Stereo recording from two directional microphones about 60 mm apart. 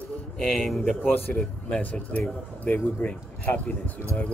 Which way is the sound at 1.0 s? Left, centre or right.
Left.